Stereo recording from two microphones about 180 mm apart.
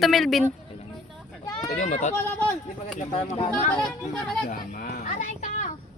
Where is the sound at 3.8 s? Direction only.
5° left (ahead or behind).